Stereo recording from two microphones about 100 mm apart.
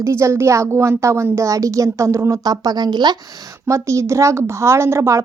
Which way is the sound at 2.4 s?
40° right (ahead or behind).